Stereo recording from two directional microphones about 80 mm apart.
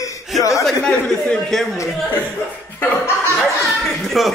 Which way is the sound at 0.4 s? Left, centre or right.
Left.